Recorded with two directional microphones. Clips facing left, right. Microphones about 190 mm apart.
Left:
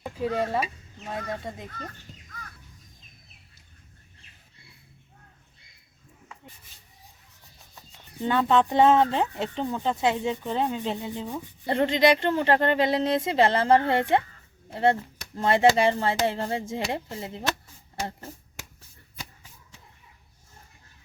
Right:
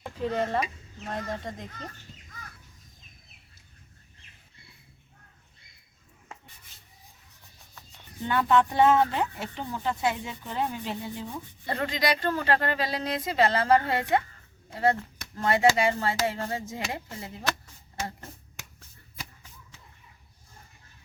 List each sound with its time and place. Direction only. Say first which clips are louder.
0.0 s speech: left 1 dB; 5° left (ahead or behind)
8.3 s speech: left 2 dB; 25° left (ahead or behind)